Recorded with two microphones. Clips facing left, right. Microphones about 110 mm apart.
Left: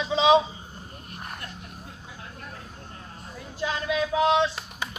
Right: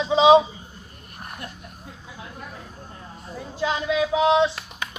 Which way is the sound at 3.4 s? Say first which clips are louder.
Right 4 dB; 20° right (ahead or behind).